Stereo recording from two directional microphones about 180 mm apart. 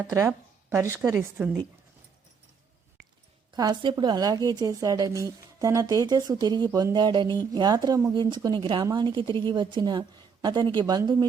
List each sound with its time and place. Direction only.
0.1 s speech: 15° right (ahead or behind)
3.5 s a woman's voice: 25° right (ahead or behind)